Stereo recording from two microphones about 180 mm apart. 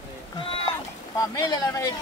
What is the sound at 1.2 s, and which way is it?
Speech, 20° left (ahead or behind).